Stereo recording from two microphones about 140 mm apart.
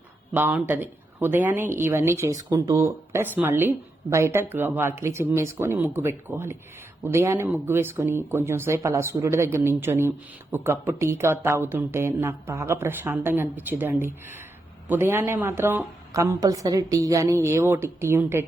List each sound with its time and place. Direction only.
0.3 s a woman's voice: 15° right (ahead or behind)